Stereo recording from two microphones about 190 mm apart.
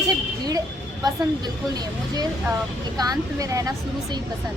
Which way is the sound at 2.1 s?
20° right (ahead or behind).